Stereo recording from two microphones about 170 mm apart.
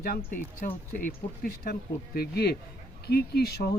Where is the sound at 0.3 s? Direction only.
50° left (ahead or behind).